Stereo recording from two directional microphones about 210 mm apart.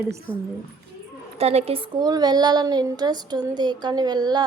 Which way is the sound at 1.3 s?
30° right (ahead or behind).